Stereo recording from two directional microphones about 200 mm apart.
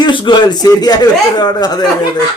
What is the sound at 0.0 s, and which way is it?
Speech, 25° left (ahead or behind).